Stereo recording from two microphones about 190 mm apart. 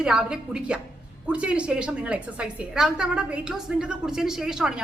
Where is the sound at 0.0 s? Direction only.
5° right (ahead or behind).